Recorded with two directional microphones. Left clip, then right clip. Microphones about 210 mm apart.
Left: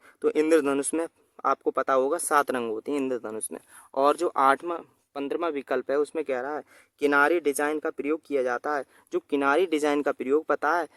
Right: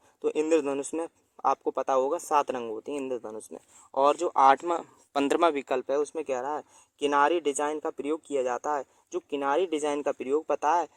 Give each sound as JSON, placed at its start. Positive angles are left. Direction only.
{"t": 0.2, "sound": "a man's voice", "side_deg": 15}
{"t": 5.6, "sound": "a man's voice", "side_deg": 20}
{"t": 7.7, "sound": "a man's voice", "side_deg": 30}